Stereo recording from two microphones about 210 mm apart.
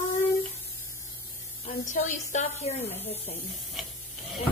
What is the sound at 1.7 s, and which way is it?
A woman's voice, 35° left (ahead or behind).